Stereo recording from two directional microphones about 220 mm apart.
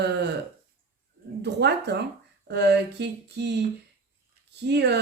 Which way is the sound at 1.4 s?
50° right (ahead or behind).